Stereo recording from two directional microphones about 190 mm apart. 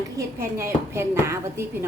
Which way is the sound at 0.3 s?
15° right (ahead or behind).